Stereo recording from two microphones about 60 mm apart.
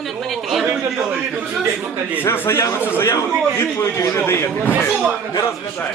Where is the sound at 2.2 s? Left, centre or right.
Left.